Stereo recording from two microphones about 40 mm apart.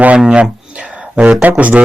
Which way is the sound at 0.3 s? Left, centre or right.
Right.